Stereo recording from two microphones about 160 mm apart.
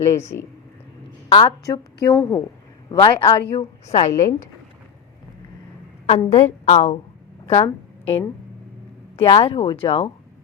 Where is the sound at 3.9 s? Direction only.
40° left (ahead or behind).